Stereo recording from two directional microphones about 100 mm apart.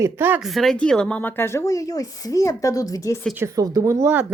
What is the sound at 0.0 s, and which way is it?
Speech, 20° right (ahead or behind).